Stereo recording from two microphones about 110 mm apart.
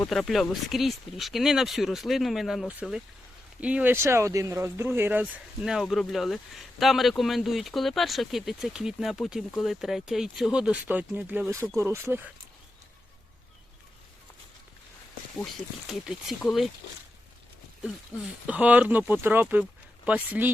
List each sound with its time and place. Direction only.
0.1 s speech: centre (ahead or behind)
3.9 s speech: 25° right (ahead or behind)
15.9 s speech: 5° right (ahead or behind)
18.4 s speech: 15° right (ahead or behind)